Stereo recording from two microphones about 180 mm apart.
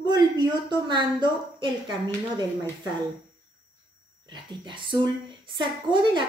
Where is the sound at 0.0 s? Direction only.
25° right (ahead or behind).